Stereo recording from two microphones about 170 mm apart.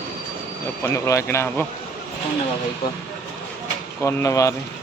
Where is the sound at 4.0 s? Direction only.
15° left (ahead or behind).